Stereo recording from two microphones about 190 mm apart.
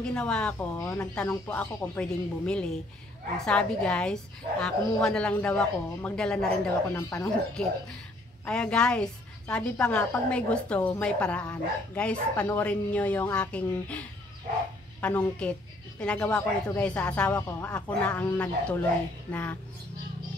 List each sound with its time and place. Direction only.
0.0 s a woman's voice: 5° left (ahead or behind)